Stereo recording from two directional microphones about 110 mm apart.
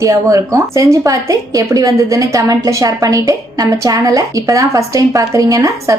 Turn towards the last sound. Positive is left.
turn(degrees=-30)  # may be behind; listen again after turning